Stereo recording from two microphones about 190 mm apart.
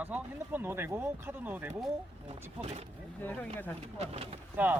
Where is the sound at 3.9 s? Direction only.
35° right (ahead or behind).